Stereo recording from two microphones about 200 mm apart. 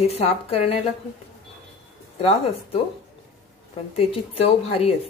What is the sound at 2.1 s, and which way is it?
Speech, 30° left (ahead or behind).